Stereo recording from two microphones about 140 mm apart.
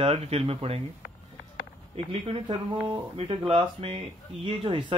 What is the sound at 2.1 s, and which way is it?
Speech, 40° right (ahead or behind).